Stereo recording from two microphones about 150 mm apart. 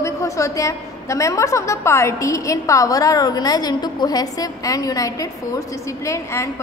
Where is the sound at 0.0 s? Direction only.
20° left (ahead or behind).